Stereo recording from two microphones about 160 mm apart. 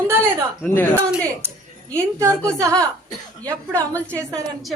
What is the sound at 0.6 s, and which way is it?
Speech, 10° left (ahead or behind).